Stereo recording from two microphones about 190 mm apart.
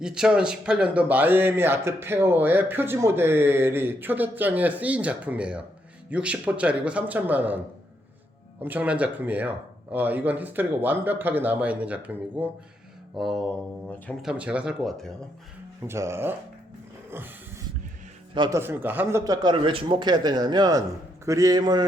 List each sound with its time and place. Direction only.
0.0 s a man's voice: 5° right (ahead or behind)
8.6 s a man's voice: 10° right (ahead or behind)
15.9 s a man's voice: 15° right (ahead or behind)
17.1 s a sound: 10° right (ahead or behind)
18.3 s a man's voice: 20° right (ahead or behind)